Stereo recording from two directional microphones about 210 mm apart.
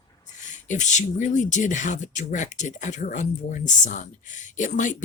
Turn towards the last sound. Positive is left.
turn(degrees=35)  # may be behind; listen again after turning